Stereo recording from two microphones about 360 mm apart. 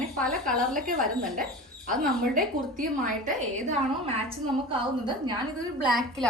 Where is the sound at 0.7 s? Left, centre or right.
Right.